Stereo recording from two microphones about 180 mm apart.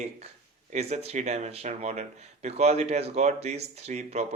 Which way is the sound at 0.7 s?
35° right (ahead or behind).